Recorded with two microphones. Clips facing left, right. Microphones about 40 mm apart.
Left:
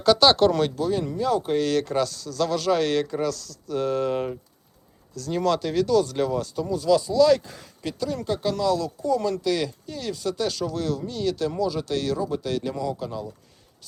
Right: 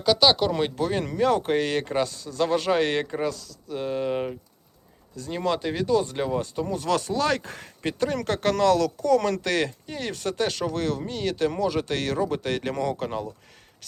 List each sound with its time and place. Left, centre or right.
0.0 s speech: centre
0.8 s speech: right
3.2 s speech: centre
6.7 s speech: right